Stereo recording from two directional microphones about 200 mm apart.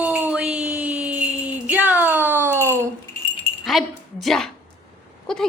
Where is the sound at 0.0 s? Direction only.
5° right (ahead or behind).